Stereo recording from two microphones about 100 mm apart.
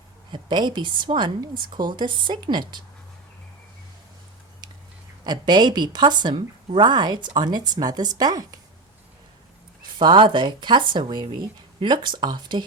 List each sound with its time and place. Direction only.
0.3 s a woman's voice: 50° right (ahead or behind)
5.2 s a woman's voice: 45° right (ahead or behind)
10.0 s a woman's voice: 50° right (ahead or behind)